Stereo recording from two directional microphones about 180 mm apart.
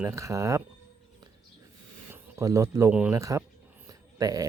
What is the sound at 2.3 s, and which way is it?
Speech, 15° right (ahead or behind).